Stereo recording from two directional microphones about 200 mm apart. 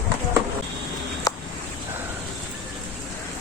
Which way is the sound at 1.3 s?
20° left (ahead or behind).